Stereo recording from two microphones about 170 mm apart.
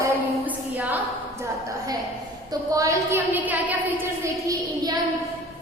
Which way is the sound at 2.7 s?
20° right (ahead or behind).